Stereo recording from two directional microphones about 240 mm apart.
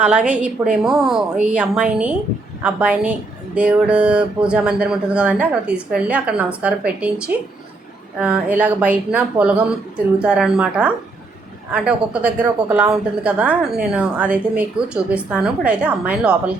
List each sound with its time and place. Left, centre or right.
0.0 s a woman's voice: centre